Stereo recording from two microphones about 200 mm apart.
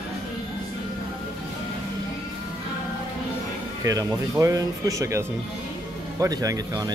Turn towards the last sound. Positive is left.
turn(degrees=-20)  # may be behind; listen again after turning